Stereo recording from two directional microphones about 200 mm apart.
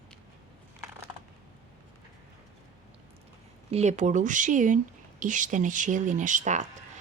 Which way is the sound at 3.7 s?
35° right (ahead or behind).